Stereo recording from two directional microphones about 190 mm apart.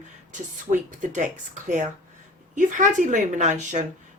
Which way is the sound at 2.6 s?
40° right (ahead or behind).